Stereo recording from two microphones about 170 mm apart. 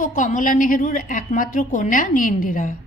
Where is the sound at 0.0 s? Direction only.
50° left (ahead or behind).